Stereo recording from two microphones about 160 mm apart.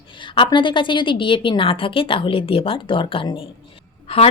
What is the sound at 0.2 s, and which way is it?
Speech, 30° left (ahead or behind).